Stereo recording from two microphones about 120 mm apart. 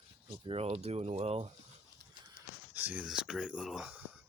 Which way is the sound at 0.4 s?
55° right (ahead or behind).